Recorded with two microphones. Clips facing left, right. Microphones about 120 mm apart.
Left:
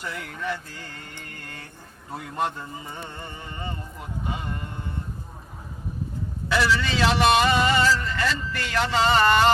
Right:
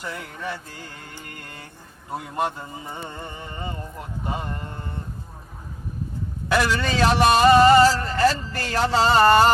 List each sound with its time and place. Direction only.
2.3 s a man's voice: 10° right (ahead or behind)
6.5 s a man's voice: 45° right (ahead or behind)